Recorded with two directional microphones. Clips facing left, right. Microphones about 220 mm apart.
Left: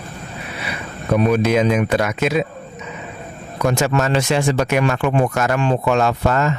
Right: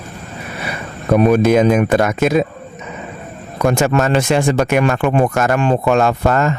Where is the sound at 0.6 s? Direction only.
50° right (ahead or behind).